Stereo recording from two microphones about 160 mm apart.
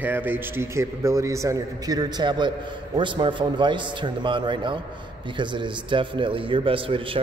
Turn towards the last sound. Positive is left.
turn(degrees=-35)  # may be behind; listen again after turning